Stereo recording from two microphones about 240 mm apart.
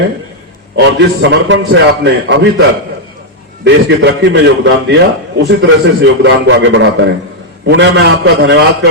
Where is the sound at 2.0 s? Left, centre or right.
Right.